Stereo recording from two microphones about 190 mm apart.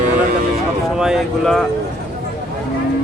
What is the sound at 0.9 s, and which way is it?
Speech, 5° right (ahead or behind).